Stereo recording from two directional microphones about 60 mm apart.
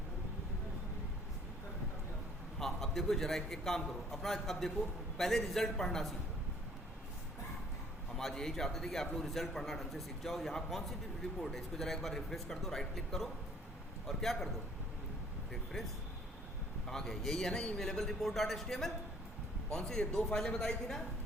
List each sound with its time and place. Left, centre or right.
2.6 s a man's voice: centre
8.1 s a man's voice: centre
16.8 s a man's voice: centre